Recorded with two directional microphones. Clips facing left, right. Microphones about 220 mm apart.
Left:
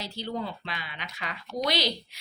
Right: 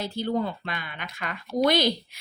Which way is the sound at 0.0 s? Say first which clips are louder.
Right 7 dB; 50° right (ahead or behind).